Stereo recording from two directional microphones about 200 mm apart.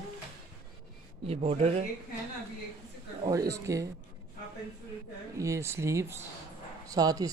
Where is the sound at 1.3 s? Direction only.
30° right (ahead or behind).